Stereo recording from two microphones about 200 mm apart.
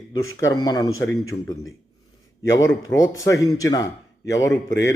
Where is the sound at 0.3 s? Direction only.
15° left (ahead or behind).